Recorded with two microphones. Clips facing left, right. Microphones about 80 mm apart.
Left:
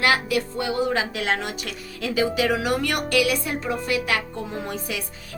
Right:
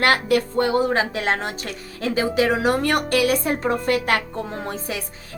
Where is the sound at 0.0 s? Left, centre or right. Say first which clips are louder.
Right 3 dB; right.